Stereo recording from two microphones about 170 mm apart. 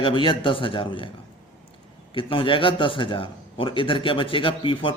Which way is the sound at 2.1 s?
30° left (ahead or behind).